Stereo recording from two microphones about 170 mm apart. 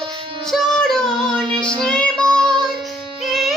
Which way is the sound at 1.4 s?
30° right (ahead or behind).